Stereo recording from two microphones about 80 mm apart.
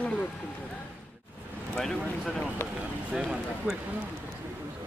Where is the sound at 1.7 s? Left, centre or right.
Centre.